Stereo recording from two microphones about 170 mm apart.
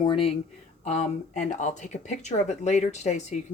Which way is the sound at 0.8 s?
45° left (ahead or behind).